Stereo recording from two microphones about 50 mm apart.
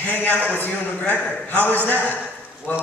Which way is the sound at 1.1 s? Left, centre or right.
Left.